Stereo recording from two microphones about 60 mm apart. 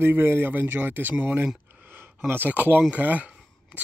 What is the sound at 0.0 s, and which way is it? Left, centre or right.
Speech, right.